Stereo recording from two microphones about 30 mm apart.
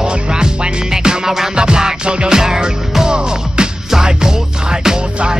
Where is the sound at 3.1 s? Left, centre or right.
Right.